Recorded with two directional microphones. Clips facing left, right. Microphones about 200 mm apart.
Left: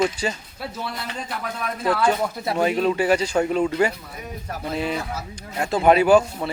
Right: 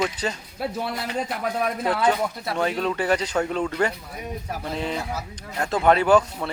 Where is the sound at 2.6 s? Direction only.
10° left (ahead or behind).